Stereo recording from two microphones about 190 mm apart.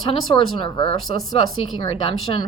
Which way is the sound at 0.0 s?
25° left (ahead or behind).